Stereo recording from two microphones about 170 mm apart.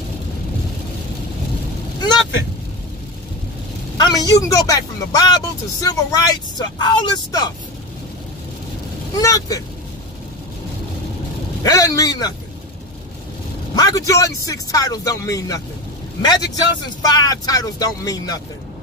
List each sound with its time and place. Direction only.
2.0 s vehicle: 25° left (ahead or behind)
4.0 s speech: 25° left (ahead or behind)
9.2 s speech: 20° left (ahead or behind)
11.6 s speech: 20° left (ahead or behind)
13.7 s speech: 20° left (ahead or behind)